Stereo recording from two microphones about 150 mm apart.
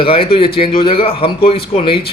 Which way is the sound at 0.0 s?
35° left (ahead or behind).